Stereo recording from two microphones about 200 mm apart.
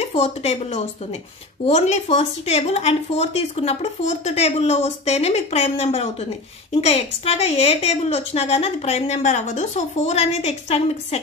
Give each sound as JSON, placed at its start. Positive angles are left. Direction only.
{"t": 0.0, "sound": "speech", "side_deg": 30}